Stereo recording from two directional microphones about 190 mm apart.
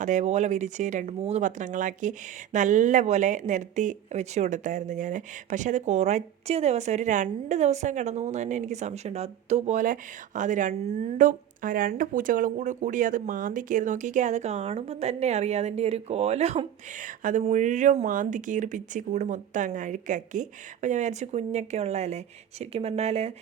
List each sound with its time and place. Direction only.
0.0 s speech: 40° right (ahead or behind)